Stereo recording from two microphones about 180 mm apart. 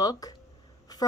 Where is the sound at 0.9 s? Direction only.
20° left (ahead or behind).